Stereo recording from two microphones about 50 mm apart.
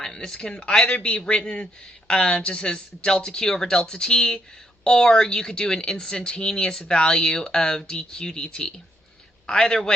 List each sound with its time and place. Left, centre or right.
0.0 s speech: centre